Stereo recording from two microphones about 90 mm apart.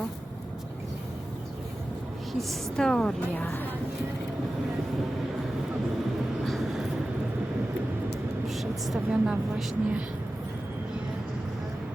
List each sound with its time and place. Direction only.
2.5 s a woman's voice: 5° left (ahead or behind)
3.2 s speech: 20° left (ahead or behind)
6.4 s vehicle: centre (ahead or behind)
8.4 s vehicle: centre (ahead or behind)
9.0 s a woman's voice: 10° right (ahead or behind)